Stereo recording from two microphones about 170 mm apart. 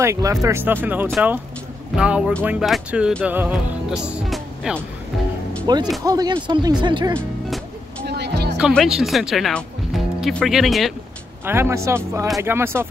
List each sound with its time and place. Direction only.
0.0 s speech: 20° right (ahead or behind)
5.7 s speech: 25° right (ahead or behind)
7.2 s music: centre (ahead or behind)
8.0 s music: 75° right (ahead or behind)
8.5 s speech: 5° right (ahead or behind)
11.4 s speech: 15° right (ahead or behind)